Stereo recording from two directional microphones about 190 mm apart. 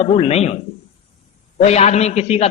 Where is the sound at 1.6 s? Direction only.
35° left (ahead or behind).